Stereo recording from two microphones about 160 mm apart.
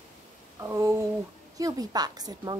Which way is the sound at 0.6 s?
20° right (ahead or behind).